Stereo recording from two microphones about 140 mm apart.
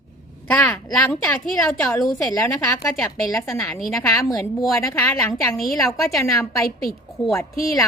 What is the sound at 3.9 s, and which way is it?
A woman's voice, 25° left (ahead or behind).